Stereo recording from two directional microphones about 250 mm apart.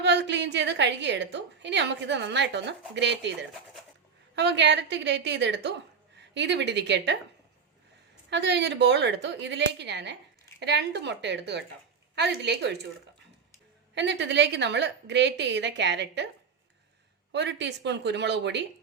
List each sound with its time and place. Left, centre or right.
0.0 s a woman's voice: right
4.4 s a woman's voice: right
8.3 s a woman's voice: right
13.9 s a woman's voice: right
17.3 s a woman's voice: right